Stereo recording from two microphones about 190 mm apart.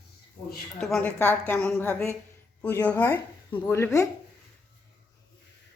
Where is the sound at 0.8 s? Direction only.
5° left (ahead or behind).